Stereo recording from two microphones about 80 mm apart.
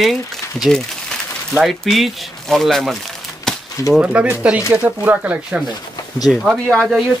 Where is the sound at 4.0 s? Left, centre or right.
Centre.